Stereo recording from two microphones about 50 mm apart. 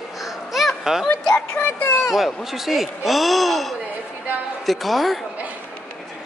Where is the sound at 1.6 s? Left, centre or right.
Left.